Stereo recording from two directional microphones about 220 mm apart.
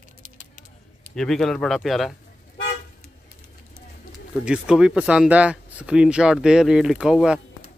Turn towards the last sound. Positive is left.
turn(degrees=-5)  # may be behind; listen again after turning